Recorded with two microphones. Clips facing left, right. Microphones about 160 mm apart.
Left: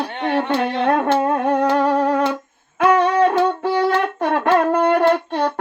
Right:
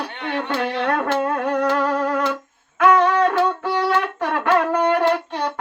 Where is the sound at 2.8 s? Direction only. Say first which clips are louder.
Left 1 dB; 30° left (ahead or behind).